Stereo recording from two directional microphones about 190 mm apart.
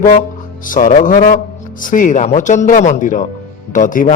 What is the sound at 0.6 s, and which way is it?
A man's voice, 45° left (ahead or behind).